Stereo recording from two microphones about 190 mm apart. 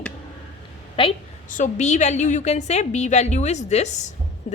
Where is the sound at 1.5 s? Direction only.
40° left (ahead or behind).